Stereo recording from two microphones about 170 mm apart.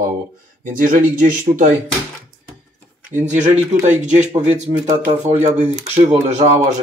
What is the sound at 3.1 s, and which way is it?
Speech, 45° right (ahead or behind).